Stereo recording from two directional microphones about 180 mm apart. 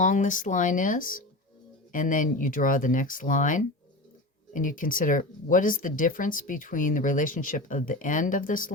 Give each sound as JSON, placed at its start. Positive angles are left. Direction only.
{"t": 0.0, "sound": "speech", "side_deg": 45}